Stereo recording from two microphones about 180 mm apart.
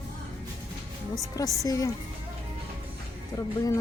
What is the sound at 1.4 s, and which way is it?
Speech, 20° left (ahead or behind).